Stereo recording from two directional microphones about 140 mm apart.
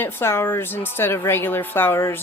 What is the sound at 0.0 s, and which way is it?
Speech, 15° left (ahead or behind).